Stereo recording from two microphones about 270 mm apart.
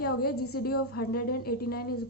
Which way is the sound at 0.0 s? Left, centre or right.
Left.